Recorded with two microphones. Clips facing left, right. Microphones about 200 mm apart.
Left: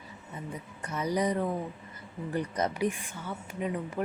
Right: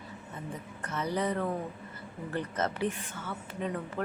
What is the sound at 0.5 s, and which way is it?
Speech, 10° left (ahead or behind).